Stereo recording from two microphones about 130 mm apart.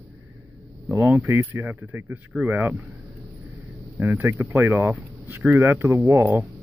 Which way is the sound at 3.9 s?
15° right (ahead or behind).